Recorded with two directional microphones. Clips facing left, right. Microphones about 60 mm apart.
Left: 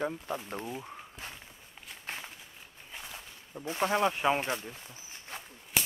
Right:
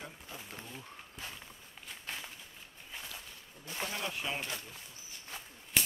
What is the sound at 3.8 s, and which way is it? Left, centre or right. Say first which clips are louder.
Speech: left 11 dB; left.